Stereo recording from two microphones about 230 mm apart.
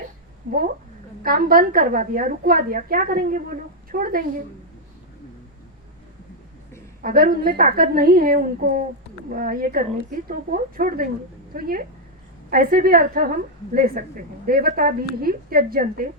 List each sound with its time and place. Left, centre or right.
0.4 s a woman's voice: right
7.0 s a woman's voice: right